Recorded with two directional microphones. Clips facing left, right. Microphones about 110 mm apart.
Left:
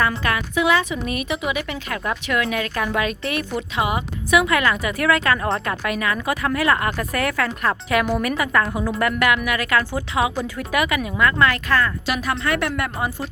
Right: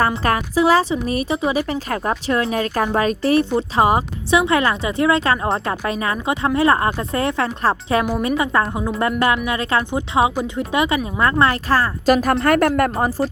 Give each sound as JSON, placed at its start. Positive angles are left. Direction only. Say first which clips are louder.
{"t": 0.3, "sound": "speech", "louder": "right 6 dB", "side_deg": -35}